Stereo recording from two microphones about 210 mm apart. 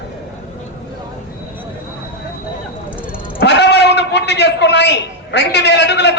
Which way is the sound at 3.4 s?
55° left (ahead or behind).